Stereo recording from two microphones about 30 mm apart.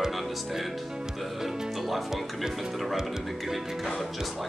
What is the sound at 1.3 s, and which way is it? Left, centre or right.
Music, centre.